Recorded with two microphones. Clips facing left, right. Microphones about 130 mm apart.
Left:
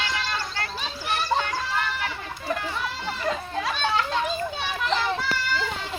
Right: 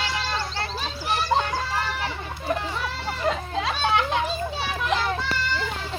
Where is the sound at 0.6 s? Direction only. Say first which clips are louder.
Right 2 dB; 30° right (ahead or behind).